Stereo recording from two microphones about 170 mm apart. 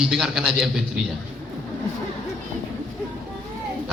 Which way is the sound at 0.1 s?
5° right (ahead or behind).